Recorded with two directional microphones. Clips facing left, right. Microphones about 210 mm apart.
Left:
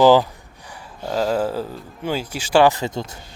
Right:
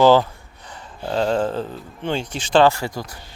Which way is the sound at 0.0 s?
15° left (ahead or behind).